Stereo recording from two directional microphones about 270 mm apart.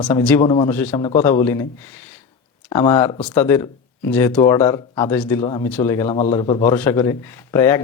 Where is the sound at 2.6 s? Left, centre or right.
Centre.